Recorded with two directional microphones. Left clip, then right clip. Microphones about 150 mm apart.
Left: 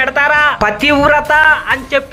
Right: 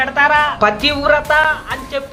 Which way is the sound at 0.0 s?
25° left (ahead or behind).